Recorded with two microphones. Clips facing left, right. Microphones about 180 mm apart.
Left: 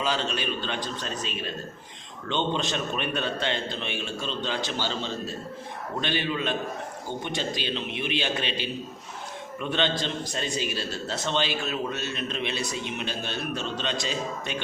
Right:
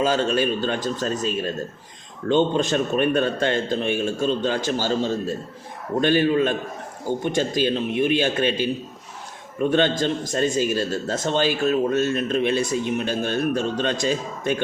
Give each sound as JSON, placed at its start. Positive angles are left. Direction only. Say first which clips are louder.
{"t": 0.0, "sound": "a man's voice", "louder": "right 8 dB", "side_deg": -45}